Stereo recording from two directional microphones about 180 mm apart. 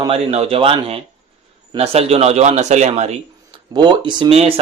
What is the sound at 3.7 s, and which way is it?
Speech, 25° right (ahead or behind).